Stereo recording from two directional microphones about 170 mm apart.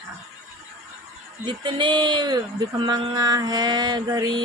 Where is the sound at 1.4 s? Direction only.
25° right (ahead or behind).